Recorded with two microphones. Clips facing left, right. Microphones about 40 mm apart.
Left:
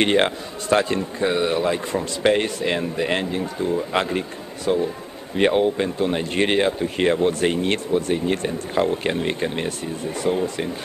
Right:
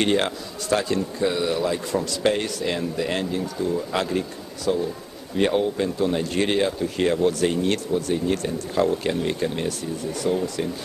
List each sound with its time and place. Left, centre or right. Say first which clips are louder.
0.0 s a man's voice: left 3 dB; left